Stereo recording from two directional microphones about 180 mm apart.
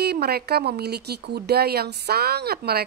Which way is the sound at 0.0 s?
60° right (ahead or behind).